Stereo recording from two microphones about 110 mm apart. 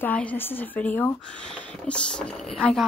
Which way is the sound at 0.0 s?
15° left (ahead or behind).